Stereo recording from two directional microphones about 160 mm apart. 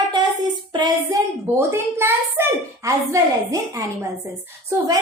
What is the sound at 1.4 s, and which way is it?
A woman's voice, 15° right (ahead or behind).